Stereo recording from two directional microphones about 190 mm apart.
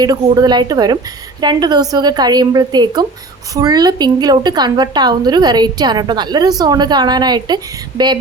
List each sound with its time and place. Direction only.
0.0 s speech: 20° right (ahead or behind)